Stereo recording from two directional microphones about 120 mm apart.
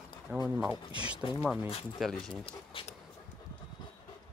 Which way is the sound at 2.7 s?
50° left (ahead or behind).